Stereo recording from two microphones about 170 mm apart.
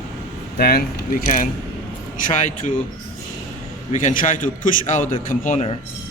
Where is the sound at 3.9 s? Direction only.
50° left (ahead or behind).